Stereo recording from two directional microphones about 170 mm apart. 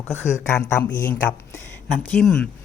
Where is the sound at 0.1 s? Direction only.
15° left (ahead or behind).